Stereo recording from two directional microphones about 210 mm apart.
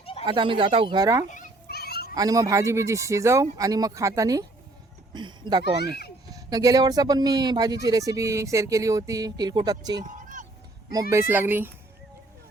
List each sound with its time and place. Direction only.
0.0 s a sound: 25° left (ahead or behind)
0.3 s speech: 25° right (ahead or behind)
1.3 s a sound: 40° left (ahead or behind)
2.1 s speech: 15° right (ahead or behind)
10.1 s vehicle: 40° right (ahead or behind)
11.1 s speech: 10° right (ahead or behind)